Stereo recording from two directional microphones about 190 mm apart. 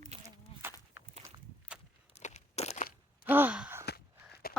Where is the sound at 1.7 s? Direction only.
5° right (ahead or behind).